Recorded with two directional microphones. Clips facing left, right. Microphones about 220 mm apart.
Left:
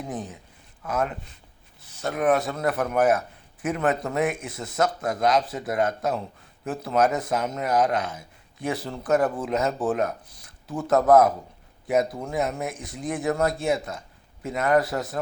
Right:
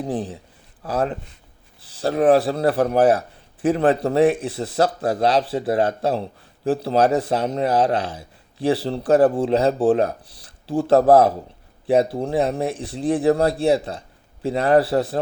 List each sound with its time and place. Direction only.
0.0 s speech: 30° right (ahead or behind)